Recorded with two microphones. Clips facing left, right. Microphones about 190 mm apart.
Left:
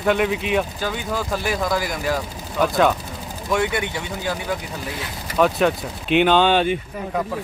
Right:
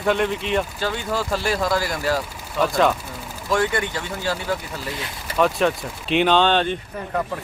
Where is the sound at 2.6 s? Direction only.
Centre (ahead or behind).